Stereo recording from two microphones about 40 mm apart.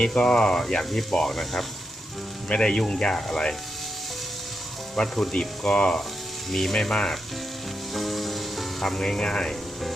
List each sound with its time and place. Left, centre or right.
0.0 s speech: left
2.5 s speech: left
5.0 s speech: centre
5.3 s speech: left
6.5 s speech: centre
6.7 s speech: centre
7.9 s frying: centre
8.8 s speech: centre
9.2 s speech: left